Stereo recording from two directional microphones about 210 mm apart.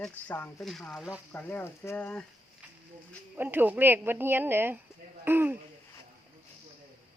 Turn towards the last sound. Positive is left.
turn(degrees=-10)  # may be behind; listen again after turning